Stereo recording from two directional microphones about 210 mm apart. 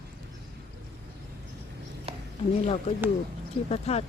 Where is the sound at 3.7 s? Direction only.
30° left (ahead or behind).